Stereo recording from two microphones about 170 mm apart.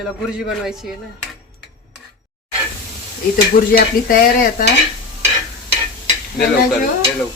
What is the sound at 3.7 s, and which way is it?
Speech, 60° left (ahead or behind).